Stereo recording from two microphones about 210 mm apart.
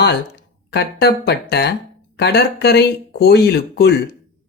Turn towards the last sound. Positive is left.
turn(degrees=50)  # may be behind; listen again after turning